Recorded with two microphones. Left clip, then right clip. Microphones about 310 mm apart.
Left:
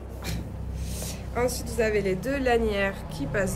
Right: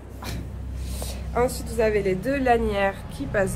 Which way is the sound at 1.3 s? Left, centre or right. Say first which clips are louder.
Right 3 dB; centre.